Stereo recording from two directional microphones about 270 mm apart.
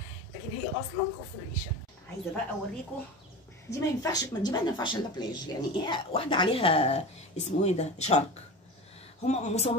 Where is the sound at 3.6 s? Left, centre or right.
Centre.